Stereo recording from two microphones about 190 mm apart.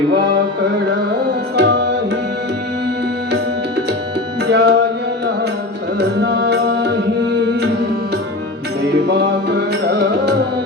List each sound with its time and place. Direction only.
1.5 s tabla: 65° right (ahead or behind)
4.4 s music: 60° right (ahead or behind)
6.0 s music: 65° right (ahead or behind)
8.8 s music: 65° right (ahead or behind)